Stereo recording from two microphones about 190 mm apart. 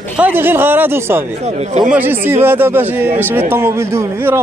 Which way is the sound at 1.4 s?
35° right (ahead or behind).